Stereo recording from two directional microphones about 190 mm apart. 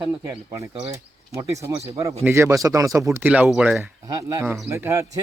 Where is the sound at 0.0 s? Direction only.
15° right (ahead or behind).